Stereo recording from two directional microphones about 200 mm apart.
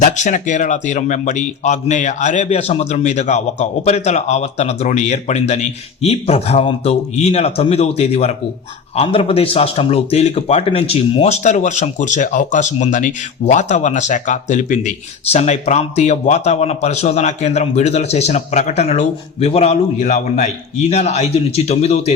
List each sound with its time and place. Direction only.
0.0 s a man's voice: 40° left (ahead or behind)